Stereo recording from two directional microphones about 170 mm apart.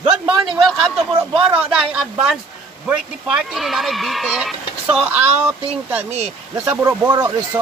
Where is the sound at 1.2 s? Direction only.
10° right (ahead or behind).